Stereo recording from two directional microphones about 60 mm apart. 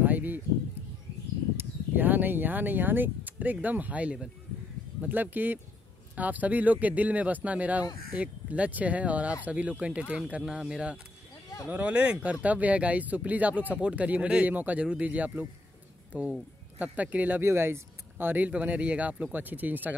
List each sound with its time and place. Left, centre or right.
0.0 s a sound: right
2.0 s speech: right
17.4 s speech: right